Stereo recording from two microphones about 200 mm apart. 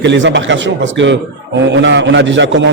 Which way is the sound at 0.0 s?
60° right (ahead or behind).